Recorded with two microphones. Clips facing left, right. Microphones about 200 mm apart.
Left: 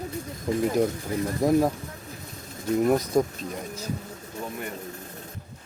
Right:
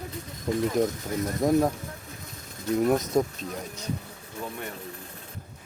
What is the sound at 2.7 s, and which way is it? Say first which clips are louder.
Speech: left 1 dB; centre (ahead or behind).